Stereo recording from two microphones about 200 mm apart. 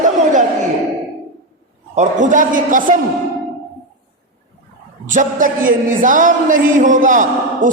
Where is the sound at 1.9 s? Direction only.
35° right (ahead or behind).